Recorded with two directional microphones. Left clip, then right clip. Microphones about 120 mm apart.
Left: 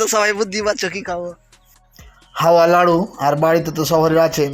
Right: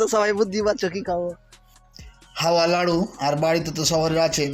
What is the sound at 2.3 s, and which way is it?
Speech, 25° left (ahead or behind).